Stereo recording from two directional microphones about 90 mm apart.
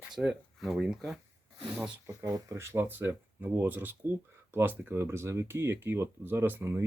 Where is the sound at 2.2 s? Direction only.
35° right (ahead or behind).